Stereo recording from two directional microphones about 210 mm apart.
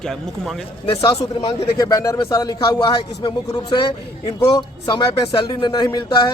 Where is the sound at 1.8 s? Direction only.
15° left (ahead or behind).